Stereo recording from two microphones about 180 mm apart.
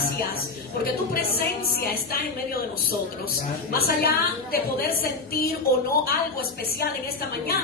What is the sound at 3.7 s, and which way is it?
A woman's voice, 60° left (ahead or behind).